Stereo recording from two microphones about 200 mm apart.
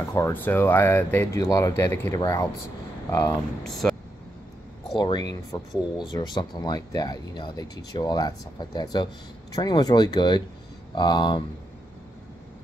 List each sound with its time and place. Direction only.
0.1 s speech: 10° left (ahead or behind)
3.6 s speech: centre (ahead or behind)
4.9 s speech: 20° left (ahead or behind)